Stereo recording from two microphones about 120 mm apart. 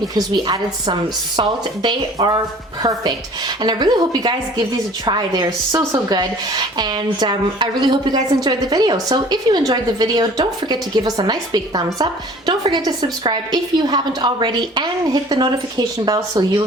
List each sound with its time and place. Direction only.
0.1 s a woman's voice: 35° right (ahead or behind)